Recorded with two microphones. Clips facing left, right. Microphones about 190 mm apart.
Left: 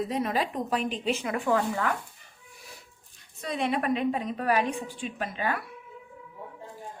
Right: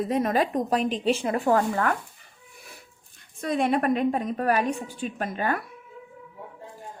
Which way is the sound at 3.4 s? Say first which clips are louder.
Right 5 dB; 50° right (ahead or behind).